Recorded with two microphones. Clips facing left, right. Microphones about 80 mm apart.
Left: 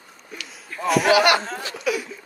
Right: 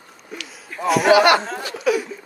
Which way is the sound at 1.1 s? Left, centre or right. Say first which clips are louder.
Right 4 dB; right.